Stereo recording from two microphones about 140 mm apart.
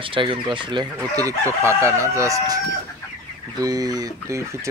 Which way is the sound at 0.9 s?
25° right (ahead or behind).